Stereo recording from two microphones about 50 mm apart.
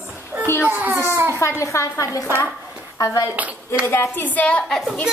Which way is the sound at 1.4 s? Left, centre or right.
Left.